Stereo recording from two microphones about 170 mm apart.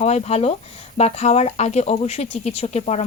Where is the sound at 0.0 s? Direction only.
40° left (ahead or behind).